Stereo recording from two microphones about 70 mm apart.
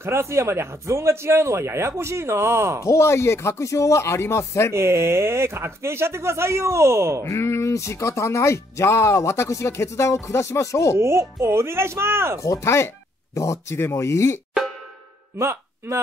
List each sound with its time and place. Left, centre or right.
0.0 s a man's voice: right
2.8 s speech: left
4.7 s a man's voice: right
7.2 s speech: left
11.0 s a man's voice: right
12.4 s speech: left
15.3 s a sound: right